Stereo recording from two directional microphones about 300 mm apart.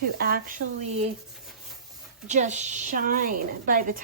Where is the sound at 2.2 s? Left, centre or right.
Right.